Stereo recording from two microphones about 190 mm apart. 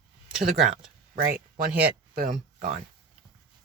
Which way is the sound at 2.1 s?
50° right (ahead or behind).